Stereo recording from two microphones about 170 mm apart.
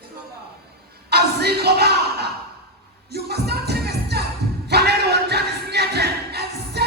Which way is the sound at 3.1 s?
70° right (ahead or behind).